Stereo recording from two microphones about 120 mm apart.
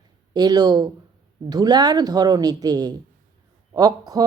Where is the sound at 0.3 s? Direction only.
35° right (ahead or behind).